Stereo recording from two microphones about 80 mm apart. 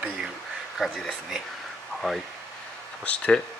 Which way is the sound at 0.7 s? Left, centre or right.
Centre.